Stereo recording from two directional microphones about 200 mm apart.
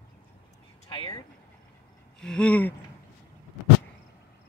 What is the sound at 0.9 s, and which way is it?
Speech, 20° left (ahead or behind).